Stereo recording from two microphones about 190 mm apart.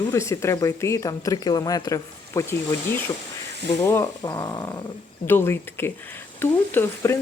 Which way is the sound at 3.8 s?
15° left (ahead or behind).